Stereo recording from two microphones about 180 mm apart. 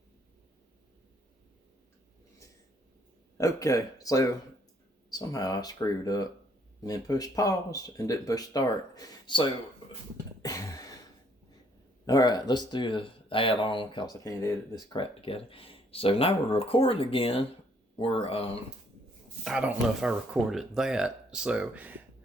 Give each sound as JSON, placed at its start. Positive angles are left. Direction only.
{"t": 3.3, "sound": "speech", "side_deg": 20}
{"t": 10.4, "sound": "a sound", "side_deg": 15}
{"t": 12.0, "sound": "speech", "side_deg": 20}
{"t": 19.5, "sound": "speech", "side_deg": -5}